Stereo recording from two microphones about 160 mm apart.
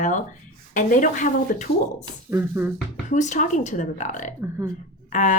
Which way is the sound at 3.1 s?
50° left (ahead or behind).